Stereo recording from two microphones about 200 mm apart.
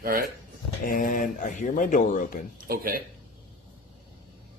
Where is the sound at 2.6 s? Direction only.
45° right (ahead or behind).